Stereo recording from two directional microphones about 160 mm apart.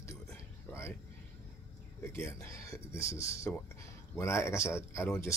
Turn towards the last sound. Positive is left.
turn(degrees=15)  # may be behind; listen again after turning